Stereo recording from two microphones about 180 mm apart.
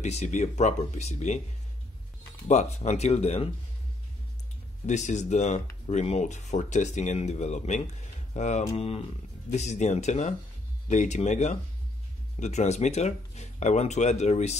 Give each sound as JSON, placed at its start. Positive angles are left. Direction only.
{"t": 0.0, "sound": "speech", "side_deg": 40}
{"t": 2.4, "sound": "speech", "side_deg": 40}
{"t": 4.8, "sound": "speech", "side_deg": 40}